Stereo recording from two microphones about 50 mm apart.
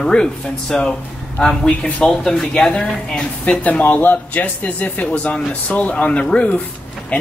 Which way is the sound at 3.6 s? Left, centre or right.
Left.